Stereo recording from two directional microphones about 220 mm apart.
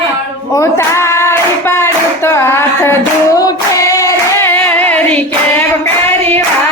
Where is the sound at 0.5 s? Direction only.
15° left (ahead or behind).